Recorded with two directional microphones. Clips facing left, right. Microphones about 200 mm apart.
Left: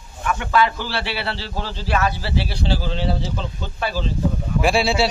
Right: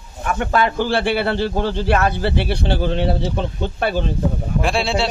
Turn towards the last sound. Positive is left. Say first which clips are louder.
# left 1 dB
turn(degrees=5)  # may be behind; listen again after turning